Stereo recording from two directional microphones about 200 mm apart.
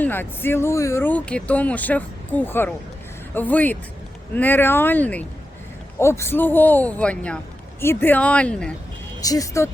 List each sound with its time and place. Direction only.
0.0 s speech: 10° left (ahead or behind)
9.2 s speech: 15° left (ahead or behind)